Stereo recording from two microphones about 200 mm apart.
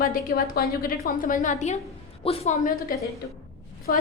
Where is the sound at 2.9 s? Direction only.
45° left (ahead or behind).